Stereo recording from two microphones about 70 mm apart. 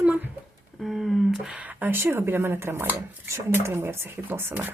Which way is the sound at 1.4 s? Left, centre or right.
Centre.